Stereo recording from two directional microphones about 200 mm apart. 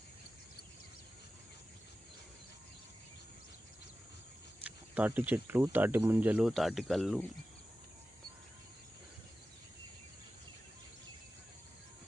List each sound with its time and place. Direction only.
4.6 s speech: 5° right (ahead or behind)